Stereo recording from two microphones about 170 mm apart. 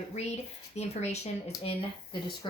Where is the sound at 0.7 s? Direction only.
40° left (ahead or behind).